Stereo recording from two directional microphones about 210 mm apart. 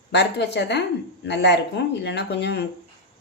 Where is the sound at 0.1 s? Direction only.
55° left (ahead or behind).